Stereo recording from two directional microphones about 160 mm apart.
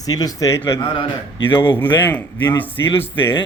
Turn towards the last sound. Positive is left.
turn(degrees=15)  # may be behind; listen again after turning